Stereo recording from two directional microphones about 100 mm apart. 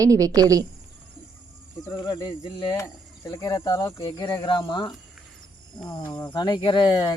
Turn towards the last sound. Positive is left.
turn(degrees=50)  # may be behind; listen again after turning